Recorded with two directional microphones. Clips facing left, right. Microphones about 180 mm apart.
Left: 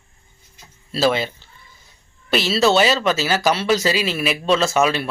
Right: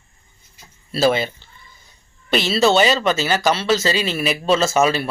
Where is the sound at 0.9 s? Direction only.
Centre (ahead or behind).